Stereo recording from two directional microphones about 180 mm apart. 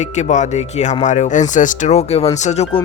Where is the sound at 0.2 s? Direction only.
40° left (ahead or behind).